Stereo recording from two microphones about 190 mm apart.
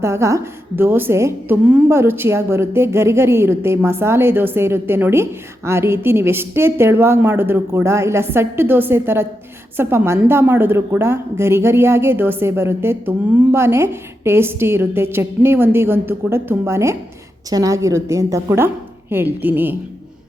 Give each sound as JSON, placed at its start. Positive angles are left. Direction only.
{"t": 0.0, "sound": "a woman's voice", "side_deg": -15}